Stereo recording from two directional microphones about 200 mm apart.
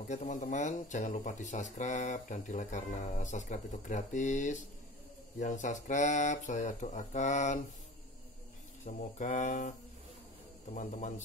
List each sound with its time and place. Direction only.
0.1 s speech: 35° left (ahead or behind)
8.8 s speech: 40° left (ahead or behind)